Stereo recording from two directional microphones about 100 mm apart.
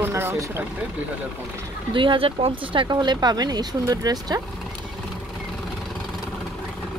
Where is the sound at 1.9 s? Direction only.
55° right (ahead or behind).